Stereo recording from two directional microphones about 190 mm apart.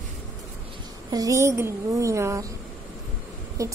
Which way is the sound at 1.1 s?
20° right (ahead or behind).